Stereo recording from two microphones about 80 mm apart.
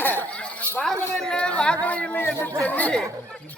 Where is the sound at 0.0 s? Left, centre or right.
Left.